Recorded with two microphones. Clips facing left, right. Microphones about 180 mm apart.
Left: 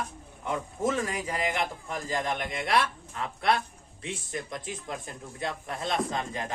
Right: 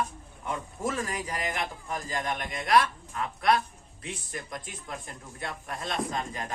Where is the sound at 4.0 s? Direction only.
25° left (ahead or behind).